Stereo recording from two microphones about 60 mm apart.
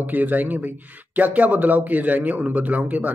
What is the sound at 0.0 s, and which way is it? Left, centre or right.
A man's voice, right.